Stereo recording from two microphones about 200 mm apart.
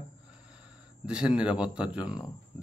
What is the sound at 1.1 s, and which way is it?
A man's voice, 5° right (ahead or behind).